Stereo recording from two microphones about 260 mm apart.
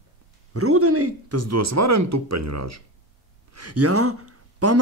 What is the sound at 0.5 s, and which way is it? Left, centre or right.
Speech, right.